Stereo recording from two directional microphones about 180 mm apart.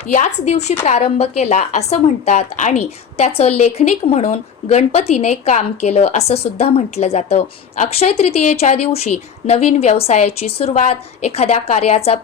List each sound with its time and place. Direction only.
0.1 s speech: 40° left (ahead or behind)